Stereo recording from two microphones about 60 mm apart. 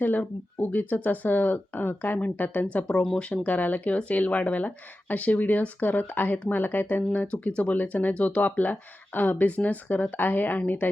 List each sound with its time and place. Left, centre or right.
0.0 s speech: left